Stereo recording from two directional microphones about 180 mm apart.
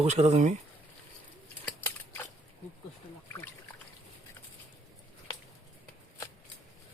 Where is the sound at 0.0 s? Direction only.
35° right (ahead or behind).